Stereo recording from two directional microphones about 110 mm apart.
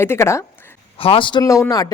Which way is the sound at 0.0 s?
25° left (ahead or behind).